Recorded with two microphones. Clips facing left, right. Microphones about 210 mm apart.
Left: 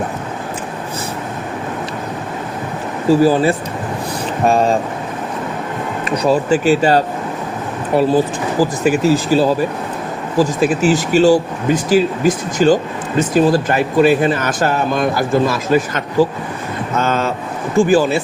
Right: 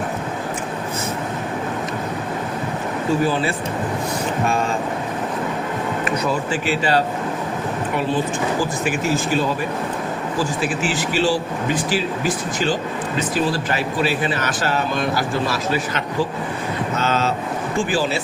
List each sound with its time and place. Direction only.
3.1 s speech: 35° left (ahead or behind)
6.5 s speech: 45° left (ahead or behind)
17.0 s vehicle: 50° left (ahead or behind)
17.7 s speech: 45° left (ahead or behind)